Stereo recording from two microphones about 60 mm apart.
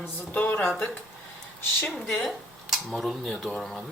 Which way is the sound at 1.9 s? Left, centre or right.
Centre.